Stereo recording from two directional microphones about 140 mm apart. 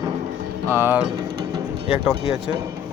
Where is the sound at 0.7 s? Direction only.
15° right (ahead or behind).